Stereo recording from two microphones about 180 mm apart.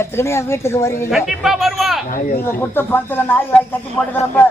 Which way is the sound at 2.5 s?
10° left (ahead or behind).